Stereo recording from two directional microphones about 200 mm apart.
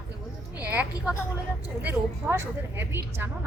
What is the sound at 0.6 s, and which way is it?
A woman's voice, 5° right (ahead or behind).